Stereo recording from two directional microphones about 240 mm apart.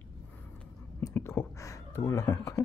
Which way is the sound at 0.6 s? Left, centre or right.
Centre.